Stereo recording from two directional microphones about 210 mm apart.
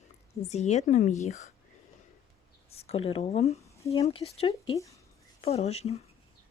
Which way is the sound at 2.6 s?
30° left (ahead or behind).